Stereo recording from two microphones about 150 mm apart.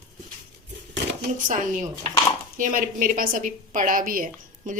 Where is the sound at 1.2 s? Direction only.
60° right (ahead or behind).